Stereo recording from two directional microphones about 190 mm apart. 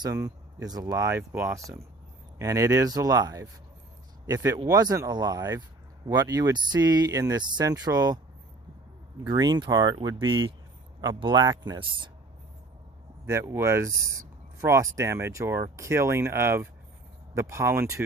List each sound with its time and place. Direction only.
0.0 s speech: 15° right (ahead or behind)
9.2 s speech: 20° right (ahead or behind)
13.2 s speech: 15° right (ahead or behind)